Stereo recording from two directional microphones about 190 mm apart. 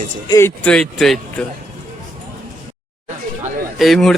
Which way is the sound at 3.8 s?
Centre (ahead or behind).